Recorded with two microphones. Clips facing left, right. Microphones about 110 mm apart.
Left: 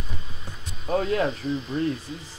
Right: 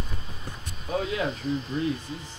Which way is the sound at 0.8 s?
45° left (ahead or behind).